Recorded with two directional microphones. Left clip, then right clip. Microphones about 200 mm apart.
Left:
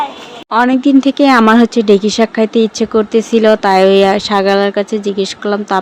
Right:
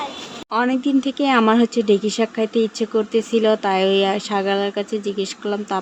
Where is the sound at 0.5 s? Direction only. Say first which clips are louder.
Left 9 dB; 25° left (ahead or behind).